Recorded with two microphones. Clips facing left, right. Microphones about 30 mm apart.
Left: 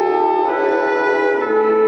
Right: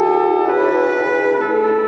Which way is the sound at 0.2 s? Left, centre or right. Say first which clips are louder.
Right 1 dB; left.